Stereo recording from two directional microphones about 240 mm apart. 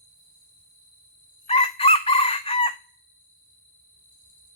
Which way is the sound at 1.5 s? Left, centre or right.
Left.